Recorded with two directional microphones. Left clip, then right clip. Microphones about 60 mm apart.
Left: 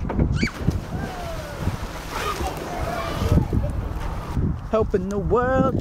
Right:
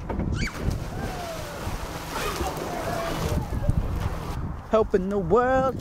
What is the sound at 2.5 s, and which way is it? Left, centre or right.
Run, right.